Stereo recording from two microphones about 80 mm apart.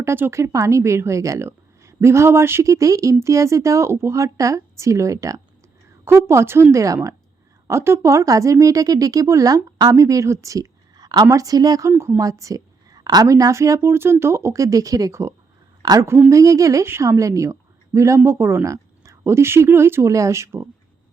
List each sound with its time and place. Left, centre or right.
0.0 s a woman's voice: right
11.9 s a woman's voice: right
13.2 s speech: right
15.8 s a woman's voice: right
16.3 s a woman's voice: right